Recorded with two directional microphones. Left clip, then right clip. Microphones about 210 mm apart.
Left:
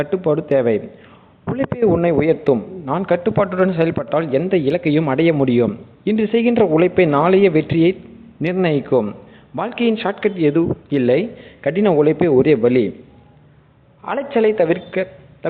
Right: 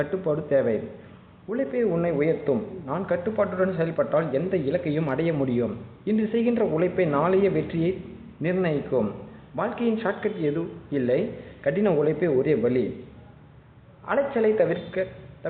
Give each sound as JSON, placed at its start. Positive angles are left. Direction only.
{"t": 0.0, "sound": "a man's voice", "side_deg": 35}
{"t": 14.1, "sound": "a man's voice", "side_deg": 40}